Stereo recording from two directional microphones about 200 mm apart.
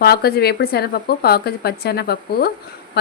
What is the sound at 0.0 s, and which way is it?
A woman's voice, 50° left (ahead or behind).